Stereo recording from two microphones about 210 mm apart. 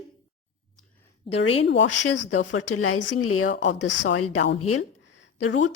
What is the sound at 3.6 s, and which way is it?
Speech, 60° left (ahead or behind).